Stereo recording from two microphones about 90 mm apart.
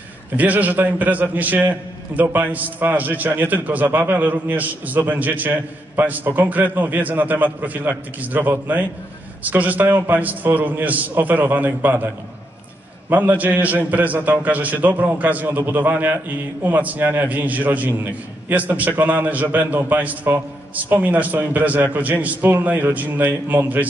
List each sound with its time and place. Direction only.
0.4 s a man's voice: 20° right (ahead or behind)
13.1 s a man's voice: 20° right (ahead or behind)